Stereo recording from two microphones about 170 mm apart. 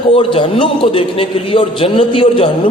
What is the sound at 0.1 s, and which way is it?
A man's voice, 30° left (ahead or behind).